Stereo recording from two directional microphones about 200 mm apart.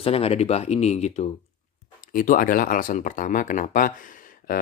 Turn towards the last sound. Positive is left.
turn(degrees=45)  # may be behind; listen again after turning